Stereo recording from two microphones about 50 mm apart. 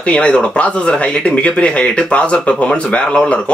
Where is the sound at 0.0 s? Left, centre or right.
Left.